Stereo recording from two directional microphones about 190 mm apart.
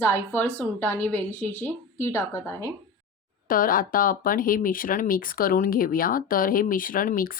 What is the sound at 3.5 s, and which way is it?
Speech, 50° left (ahead or behind).